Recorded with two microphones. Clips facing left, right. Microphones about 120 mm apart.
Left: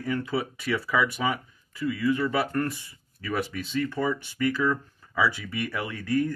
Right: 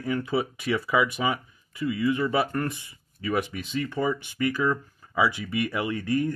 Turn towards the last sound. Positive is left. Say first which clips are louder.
# right 1 dB
turn(degrees=-15)  # may be behind; listen again after turning